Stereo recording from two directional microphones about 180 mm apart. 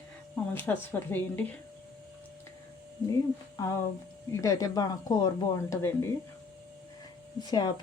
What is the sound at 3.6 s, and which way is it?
A woman's voice, 20° left (ahead or behind).